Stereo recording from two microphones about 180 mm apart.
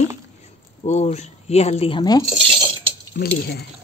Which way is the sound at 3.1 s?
65° left (ahead or behind).